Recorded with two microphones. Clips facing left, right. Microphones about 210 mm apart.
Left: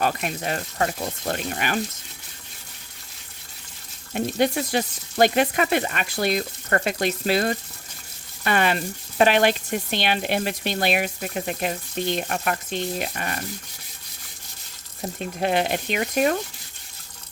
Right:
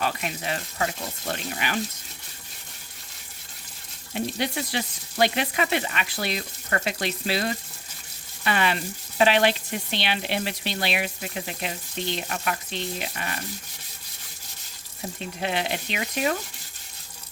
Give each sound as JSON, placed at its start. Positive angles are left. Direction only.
{"t": 0.0, "sound": "speech", "side_deg": 45}
{"t": 4.1, "sound": "speech", "side_deg": 50}
{"t": 15.4, "sound": "speech", "side_deg": 50}